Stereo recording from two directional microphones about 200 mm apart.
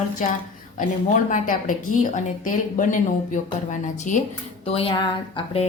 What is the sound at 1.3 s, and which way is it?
A woman's voice, 40° left (ahead or behind).